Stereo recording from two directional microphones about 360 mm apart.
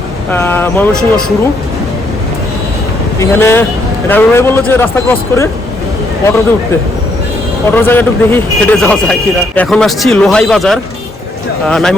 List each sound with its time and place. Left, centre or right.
0.3 s speech: centre
3.2 s speech: centre
7.7 s speech: centre